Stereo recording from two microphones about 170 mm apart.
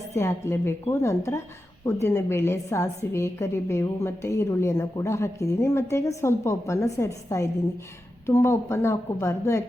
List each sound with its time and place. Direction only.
0.1 s a woman's voice: 15° left (ahead or behind)